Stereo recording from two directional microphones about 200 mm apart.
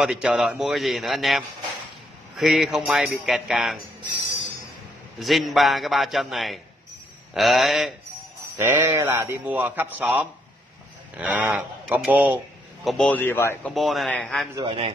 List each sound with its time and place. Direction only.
0.0 s a man's voice: 5° right (ahead or behind)
5.2 s a man's voice: centre (ahead or behind)
8.5 s a man's voice: 10° right (ahead or behind)
12.8 s a man's voice: 5° left (ahead or behind)
14.5 s a man's voice: 25° right (ahead or behind)